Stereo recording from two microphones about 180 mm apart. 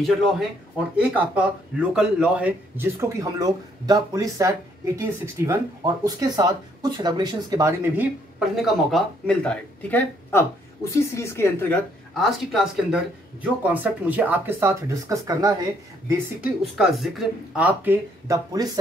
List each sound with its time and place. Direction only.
1.0 s a man's voice: 10° right (ahead or behind); by 11.8 s 15° left (ahead or behind)
12.2 s a man's voice: centre (ahead or behind); by 15.5 s 20° right (ahead or behind)
16.3 s a man's voice: centre (ahead or behind); by 18.7 s 20° right (ahead or behind)